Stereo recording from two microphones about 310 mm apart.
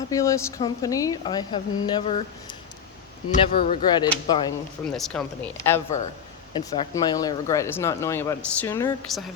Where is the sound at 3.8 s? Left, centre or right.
Centre.